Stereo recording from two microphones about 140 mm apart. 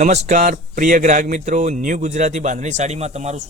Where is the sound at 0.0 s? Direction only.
55° right (ahead or behind).